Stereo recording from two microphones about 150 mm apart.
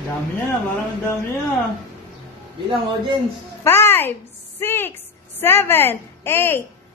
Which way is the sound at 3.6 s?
15° left (ahead or behind).